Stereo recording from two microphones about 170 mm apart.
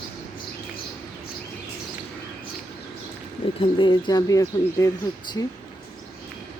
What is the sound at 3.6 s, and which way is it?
Speech, 30° left (ahead or behind).